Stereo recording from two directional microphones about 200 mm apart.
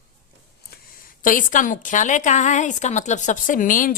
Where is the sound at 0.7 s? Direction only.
45° left (ahead or behind).